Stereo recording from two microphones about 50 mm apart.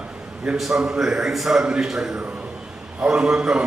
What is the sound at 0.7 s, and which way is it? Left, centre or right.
A man's voice, centre.